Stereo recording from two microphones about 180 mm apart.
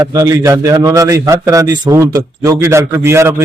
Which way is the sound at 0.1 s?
20° right (ahead or behind).